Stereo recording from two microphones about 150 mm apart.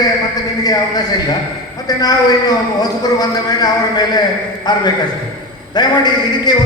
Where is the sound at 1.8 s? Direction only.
25° left (ahead or behind).